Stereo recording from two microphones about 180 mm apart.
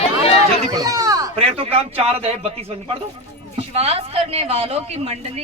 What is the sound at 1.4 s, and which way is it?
Speech, 35° right (ahead or behind).